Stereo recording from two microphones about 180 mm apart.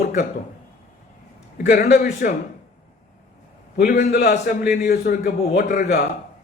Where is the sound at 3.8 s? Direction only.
55° left (ahead or behind).